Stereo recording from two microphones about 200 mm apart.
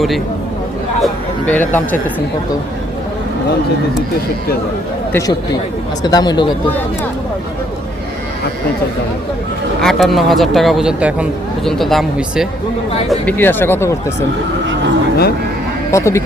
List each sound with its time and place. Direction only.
1.0 s speech: 10° left (ahead or behind)
5.1 s speech: 15° left (ahead or behind)
9.8 s speech: centre (ahead or behind)
15.9 s speech: 15° left (ahead or behind)